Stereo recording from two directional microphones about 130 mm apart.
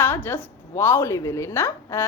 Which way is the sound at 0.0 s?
15° left (ahead or behind).